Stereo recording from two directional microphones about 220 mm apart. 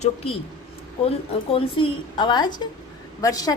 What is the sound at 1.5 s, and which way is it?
A woman's voice, 25° left (ahead or behind).